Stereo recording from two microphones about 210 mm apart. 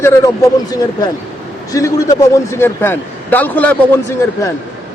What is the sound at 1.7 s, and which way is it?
Speech, 15° left (ahead or behind).